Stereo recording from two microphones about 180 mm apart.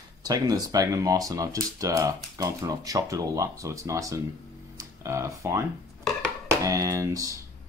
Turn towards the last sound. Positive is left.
turn(degrees=-20)  # may be behind; listen again after turning